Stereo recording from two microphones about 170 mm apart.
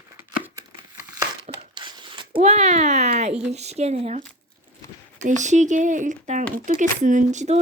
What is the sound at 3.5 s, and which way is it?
Speech, 40° right (ahead or behind).